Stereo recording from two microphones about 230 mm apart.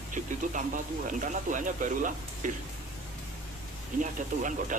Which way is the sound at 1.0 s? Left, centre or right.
Right.